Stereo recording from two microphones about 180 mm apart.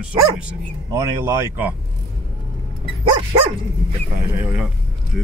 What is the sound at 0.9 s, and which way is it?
Speech, 15° right (ahead or behind).